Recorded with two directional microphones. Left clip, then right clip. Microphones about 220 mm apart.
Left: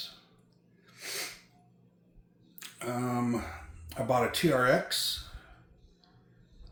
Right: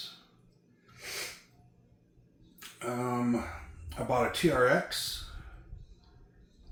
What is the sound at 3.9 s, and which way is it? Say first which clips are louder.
Speech: left 1 dB; 50° left (ahead or behind).